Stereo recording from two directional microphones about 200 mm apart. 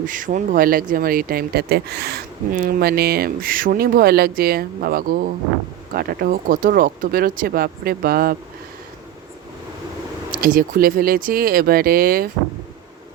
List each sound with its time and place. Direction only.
0.0 s speech: 40° right (ahead or behind)
10.4 s speech: 45° right (ahead or behind)